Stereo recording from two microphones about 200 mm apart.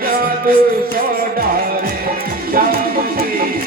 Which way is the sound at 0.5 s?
45° right (ahead or behind).